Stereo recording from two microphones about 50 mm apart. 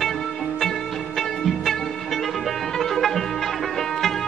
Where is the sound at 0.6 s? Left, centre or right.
Centre.